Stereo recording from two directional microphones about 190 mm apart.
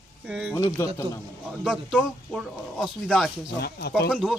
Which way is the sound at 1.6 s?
5° right (ahead or behind).